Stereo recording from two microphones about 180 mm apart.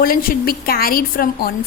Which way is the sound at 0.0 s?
55° left (ahead or behind).